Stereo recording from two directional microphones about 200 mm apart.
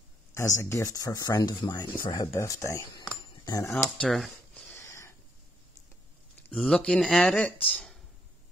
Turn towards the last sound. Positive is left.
turn(degrees=5)  # may be behind; listen again after turning